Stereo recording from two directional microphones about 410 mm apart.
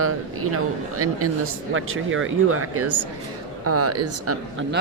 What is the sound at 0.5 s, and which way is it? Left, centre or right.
Speech, right.